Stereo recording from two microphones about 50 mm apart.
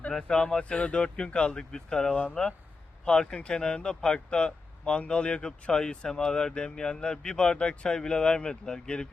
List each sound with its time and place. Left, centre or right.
0.1 s speech: centre